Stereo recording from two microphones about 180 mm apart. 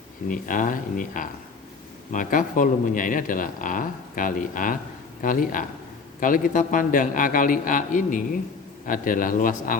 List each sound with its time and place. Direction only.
0.3 s speech: 45° left (ahead or behind)